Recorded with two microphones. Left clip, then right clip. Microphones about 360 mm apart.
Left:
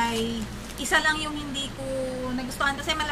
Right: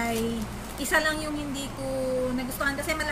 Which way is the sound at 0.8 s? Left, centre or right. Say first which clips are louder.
Left 2 dB; centre.